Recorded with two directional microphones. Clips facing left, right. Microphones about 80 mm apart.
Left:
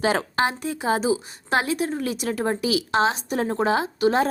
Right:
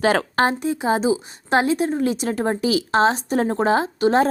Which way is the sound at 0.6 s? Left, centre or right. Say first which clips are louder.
Right 3 dB; right.